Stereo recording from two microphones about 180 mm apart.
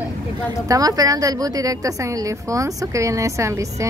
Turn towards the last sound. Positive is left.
turn(degrees=-15)  # may be behind; listen again after turning